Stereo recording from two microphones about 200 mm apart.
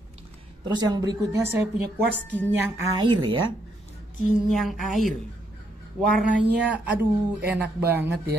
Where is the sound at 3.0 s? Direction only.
25° right (ahead or behind).